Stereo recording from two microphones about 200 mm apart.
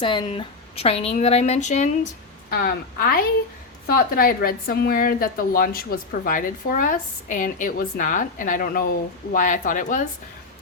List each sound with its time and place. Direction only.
0.0 s a woman's voice: 25° left (ahead or behind)
2.5 s a woman's voice: 50° left (ahead or behind)